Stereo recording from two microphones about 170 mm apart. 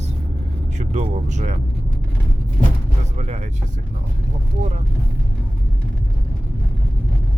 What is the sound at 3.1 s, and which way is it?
Speech, 40° right (ahead or behind).